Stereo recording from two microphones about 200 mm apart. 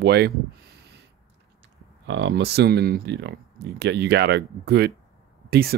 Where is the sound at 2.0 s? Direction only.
65° right (ahead or behind).